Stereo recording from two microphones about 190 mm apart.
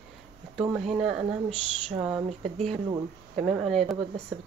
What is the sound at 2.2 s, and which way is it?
Speech, 35° right (ahead or behind).